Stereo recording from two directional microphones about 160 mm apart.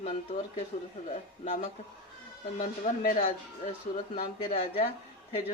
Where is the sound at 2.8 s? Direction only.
50° left (ahead or behind).